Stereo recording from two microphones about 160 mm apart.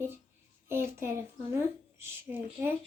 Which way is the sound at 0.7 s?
15° right (ahead or behind).